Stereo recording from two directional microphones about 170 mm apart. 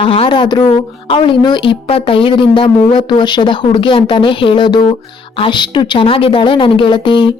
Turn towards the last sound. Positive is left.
turn(degrees=25)  # may be behind; listen again after turning